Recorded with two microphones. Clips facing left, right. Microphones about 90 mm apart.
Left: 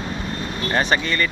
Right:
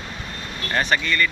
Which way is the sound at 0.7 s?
25° left (ahead or behind).